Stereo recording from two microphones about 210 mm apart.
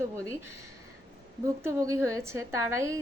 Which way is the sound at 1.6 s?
15° right (ahead or behind).